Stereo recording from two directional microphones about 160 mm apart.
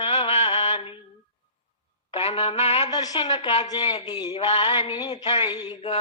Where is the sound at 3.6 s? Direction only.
30° left (ahead or behind).